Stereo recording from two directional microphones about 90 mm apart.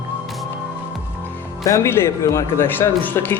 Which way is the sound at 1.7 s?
30° left (ahead or behind).